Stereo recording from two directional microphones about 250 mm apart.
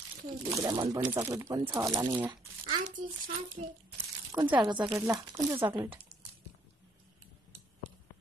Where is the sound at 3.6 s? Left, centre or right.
Right.